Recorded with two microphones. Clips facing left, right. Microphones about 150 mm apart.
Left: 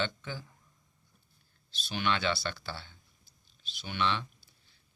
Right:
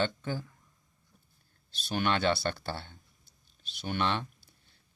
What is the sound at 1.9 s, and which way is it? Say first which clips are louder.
Speech: right 3 dB; 45° right (ahead or behind).